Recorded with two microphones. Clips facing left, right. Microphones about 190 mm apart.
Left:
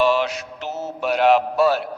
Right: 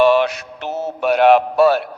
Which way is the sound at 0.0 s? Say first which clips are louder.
Right 5 dB; 60° right (ahead or behind).